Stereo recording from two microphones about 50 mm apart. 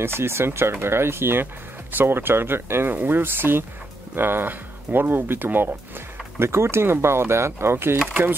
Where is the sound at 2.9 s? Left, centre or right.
Right.